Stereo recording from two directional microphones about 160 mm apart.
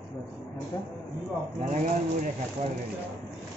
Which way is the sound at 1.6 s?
50° right (ahead or behind).